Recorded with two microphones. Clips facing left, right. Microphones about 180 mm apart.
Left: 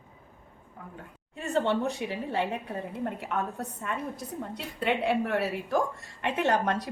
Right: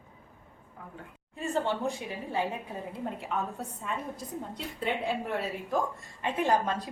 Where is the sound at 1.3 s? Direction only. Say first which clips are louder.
Left 3 dB; 70° left (ahead or behind).